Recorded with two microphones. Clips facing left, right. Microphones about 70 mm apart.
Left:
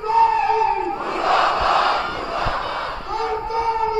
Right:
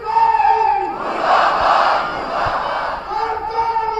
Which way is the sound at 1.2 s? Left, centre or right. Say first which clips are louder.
Right 4 dB; right.